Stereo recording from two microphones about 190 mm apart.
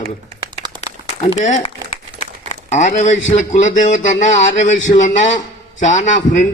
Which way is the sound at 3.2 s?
40° left (ahead or behind).